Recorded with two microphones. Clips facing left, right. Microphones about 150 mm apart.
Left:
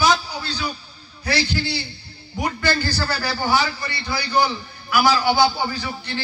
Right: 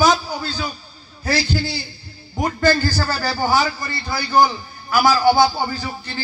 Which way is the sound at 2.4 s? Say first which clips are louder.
Right 5 dB; 45° right (ahead or behind).